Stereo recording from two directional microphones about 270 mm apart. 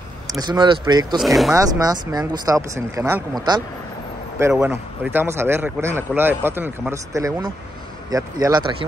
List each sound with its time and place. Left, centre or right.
0.3 s speech: centre
1.2 s speech: centre
1.5 s speech: centre